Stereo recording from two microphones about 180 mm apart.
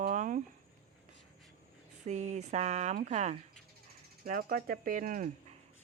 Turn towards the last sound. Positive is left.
turn(degrees=-45)  # may be behind; listen again after turning